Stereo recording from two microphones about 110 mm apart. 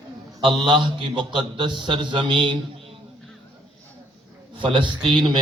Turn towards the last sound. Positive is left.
turn(degrees=-45)  # may be behind; listen again after turning